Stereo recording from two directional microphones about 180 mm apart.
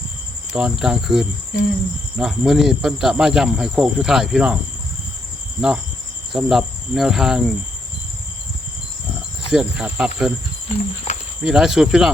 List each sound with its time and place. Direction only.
0.5 s cricket: centre (ahead or behind)
5.5 s cricket: 5° right (ahead or behind)
9.5 s cricket: 5° right (ahead or behind)
11.1 s cricket: 35° left (ahead or behind)
11.4 s cricket: 5° right (ahead or behind)